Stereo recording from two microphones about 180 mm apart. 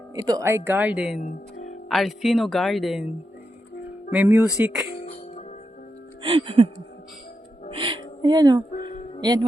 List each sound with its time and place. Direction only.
0.2 s speech: 20° right (ahead or behind); by 1.2 s 5° right (ahead or behind)
1.2 s music: 45° left (ahead or behind)
1.9 s speech: centre (ahead or behind)
4.1 s speech: 10° right (ahead or behind)
6.2 s music: 30° right (ahead or behind)
7.8 s a sound: 25° right (ahead or behind)
9.2 s speech: 25° right (ahead or behind)